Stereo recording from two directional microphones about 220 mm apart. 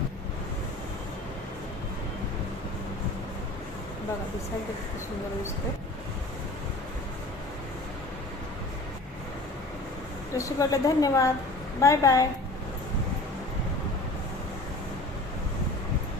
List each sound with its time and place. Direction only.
10.3 s a woman's voice: 15° left (ahead or behind)